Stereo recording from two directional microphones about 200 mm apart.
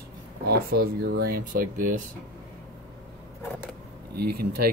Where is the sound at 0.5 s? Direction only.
50° right (ahead or behind).